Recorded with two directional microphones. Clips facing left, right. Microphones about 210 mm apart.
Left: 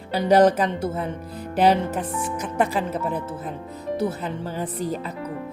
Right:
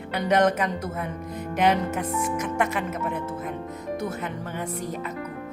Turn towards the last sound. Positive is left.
turn(degrees=30)  # may be behind; listen again after turning